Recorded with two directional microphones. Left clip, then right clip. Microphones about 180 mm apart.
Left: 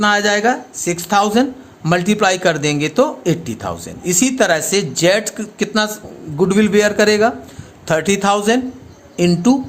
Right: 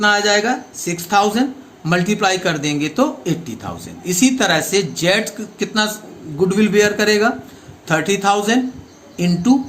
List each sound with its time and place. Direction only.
0.0 s a man's voice: 65° left (ahead or behind)